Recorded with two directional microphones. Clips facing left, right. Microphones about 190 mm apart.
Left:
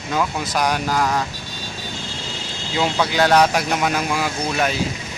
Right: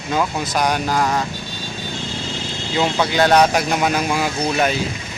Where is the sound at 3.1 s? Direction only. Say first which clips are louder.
Right 1 dB; 5° left (ahead or behind).